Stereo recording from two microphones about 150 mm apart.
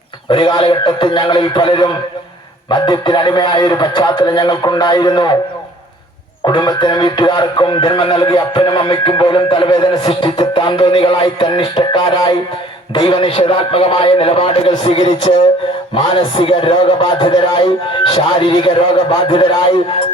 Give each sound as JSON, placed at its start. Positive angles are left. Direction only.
{"t": 0.3, "sound": "speech", "side_deg": 30}
{"t": 6.4, "sound": "speech", "side_deg": 25}